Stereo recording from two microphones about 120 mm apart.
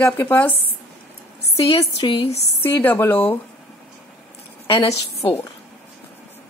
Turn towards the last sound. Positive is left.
turn(degrees=60)  # may be behind; listen again after turning